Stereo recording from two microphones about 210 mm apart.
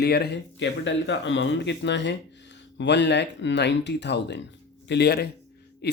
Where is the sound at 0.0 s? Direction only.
50° left (ahead or behind).